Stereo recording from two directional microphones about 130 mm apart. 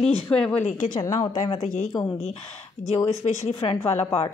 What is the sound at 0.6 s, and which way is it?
Speech, 90° left.